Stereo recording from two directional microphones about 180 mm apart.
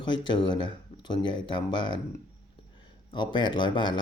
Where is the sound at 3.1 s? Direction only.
25° left (ahead or behind).